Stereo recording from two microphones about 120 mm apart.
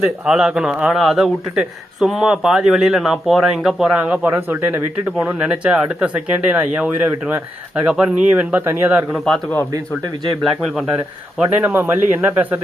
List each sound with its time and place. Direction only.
0.0 s a man's voice: 5° right (ahead or behind)
9.1 s a man's voice: centre (ahead or behind)
10.4 s a man's voice: 5° right (ahead or behind)
11.6 s speech: 15° right (ahead or behind)